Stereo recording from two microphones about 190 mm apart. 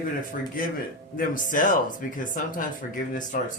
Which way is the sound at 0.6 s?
50° left (ahead or behind).